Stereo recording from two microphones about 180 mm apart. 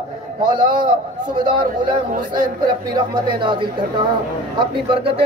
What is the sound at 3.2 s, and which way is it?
Speech, 25° right (ahead or behind).